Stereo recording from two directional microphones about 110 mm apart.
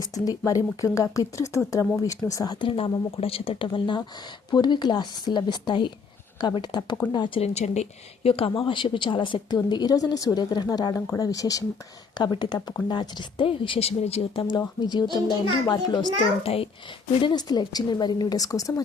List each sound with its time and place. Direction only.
0.0 s speech: 35° left (ahead or behind)
2.6 s a woman's voice: 50° left (ahead or behind)
7.4 s a woman's voice: 85° left; by 14.4 s 65° left (ahead or behind)
14.8 s a woman's voice: 45° left (ahead or behind)
16.4 s a child's voice: 60° left (ahead or behind)
17.2 s speech: 45° left (ahead or behind)